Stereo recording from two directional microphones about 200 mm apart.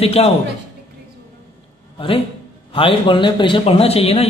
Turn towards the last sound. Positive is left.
turn(degrees=30)  # may be behind; listen again after turning